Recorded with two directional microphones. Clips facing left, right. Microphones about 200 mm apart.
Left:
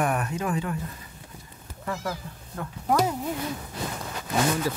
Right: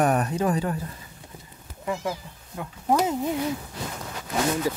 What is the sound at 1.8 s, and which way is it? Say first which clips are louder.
Speech: right 3 dB; 15° right (ahead or behind).